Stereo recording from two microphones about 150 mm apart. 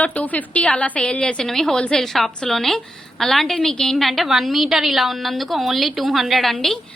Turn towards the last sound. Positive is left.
turn(degrees=0)  # may be behind; listen again after turning